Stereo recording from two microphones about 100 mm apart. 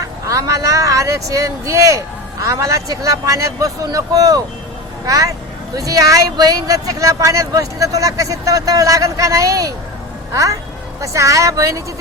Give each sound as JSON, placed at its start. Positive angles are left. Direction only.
{"t": 0.3, "sound": "speech", "side_deg": -35}